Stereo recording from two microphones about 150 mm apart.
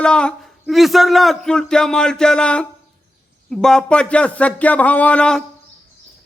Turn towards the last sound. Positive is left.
turn(degrees=5)  # may be behind; listen again after turning